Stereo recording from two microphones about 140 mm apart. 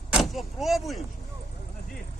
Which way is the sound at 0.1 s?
Centre (ahead or behind).